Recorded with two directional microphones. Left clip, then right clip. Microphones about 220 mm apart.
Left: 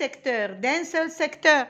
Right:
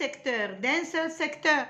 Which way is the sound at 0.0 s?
35° left (ahead or behind).